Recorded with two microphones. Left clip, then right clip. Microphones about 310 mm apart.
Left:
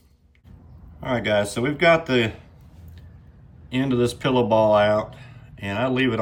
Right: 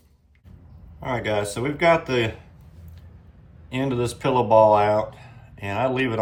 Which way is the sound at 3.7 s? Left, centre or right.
Centre.